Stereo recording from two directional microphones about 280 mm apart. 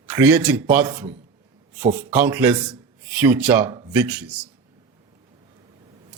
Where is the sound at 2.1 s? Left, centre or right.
Centre.